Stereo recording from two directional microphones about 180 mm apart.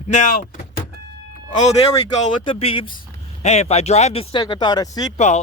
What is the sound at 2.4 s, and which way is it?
Speech, 30° left (ahead or behind).